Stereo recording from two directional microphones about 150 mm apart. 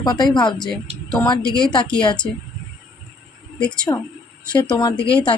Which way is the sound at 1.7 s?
30° left (ahead or behind).